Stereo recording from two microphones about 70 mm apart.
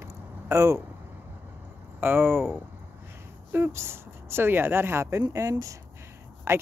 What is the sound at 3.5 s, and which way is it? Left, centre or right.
Speech, right.